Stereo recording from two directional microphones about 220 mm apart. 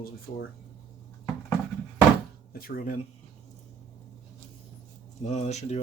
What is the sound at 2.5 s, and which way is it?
Speech, 40° left (ahead or behind).